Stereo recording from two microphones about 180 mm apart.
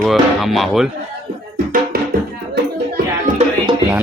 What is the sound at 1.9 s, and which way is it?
Music, 55° right (ahead or behind).